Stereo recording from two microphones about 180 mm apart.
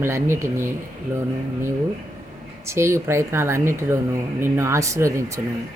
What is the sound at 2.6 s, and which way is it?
Speech, 15° right (ahead or behind).